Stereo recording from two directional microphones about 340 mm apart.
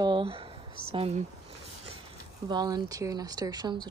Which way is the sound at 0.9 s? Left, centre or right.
Centre.